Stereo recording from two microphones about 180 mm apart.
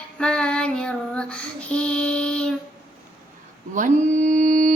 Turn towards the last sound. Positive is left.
turn(degrees=-45)  # may be behind; listen again after turning